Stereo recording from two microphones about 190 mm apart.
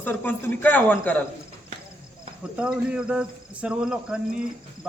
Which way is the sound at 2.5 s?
5° right (ahead or behind).